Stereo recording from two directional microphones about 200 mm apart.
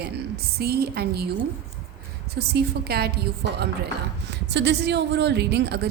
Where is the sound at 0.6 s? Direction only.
50° right (ahead or behind).